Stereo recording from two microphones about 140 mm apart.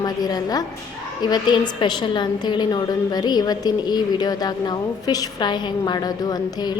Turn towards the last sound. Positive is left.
turn(degrees=30)  # may be behind; listen again after turning